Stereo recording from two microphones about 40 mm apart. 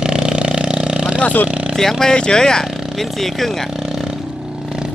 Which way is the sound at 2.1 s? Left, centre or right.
Left.